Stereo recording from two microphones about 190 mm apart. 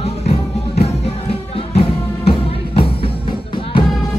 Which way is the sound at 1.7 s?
30° left (ahead or behind).